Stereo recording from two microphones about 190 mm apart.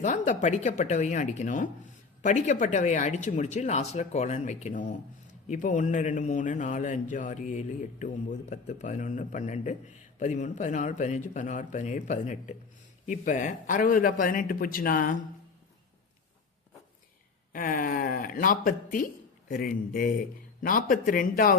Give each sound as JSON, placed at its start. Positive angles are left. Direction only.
{"t": 0.0, "sound": "a man's voice", "side_deg": 40}
{"t": 17.5, "sound": "a man's voice", "side_deg": 45}